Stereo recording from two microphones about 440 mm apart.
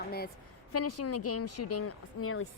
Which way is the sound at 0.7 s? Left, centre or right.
Left.